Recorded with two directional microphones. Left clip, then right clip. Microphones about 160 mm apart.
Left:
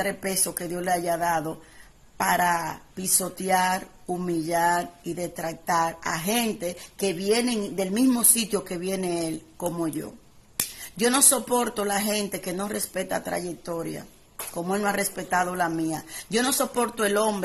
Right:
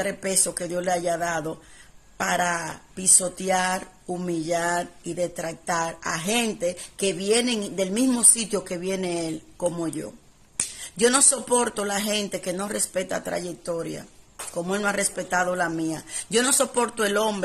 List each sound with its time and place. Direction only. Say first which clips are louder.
0.0 s speech: right 2 dB; 15° right (ahead or behind)